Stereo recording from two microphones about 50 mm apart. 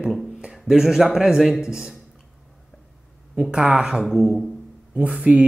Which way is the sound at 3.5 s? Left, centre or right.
Right.